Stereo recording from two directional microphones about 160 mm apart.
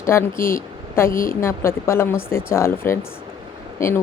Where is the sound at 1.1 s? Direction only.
60° left (ahead or behind).